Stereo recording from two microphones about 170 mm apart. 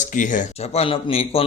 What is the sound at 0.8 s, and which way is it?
Speech, 35° left (ahead or behind).